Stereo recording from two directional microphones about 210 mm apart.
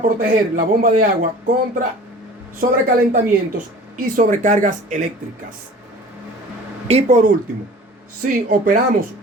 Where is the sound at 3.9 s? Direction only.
40° right (ahead or behind).